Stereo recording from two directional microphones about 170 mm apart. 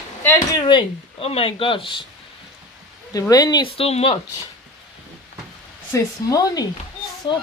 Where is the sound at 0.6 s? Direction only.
30° left (ahead or behind).